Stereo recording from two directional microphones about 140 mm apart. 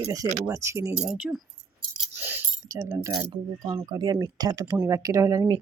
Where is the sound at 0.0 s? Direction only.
25° right (ahead or behind).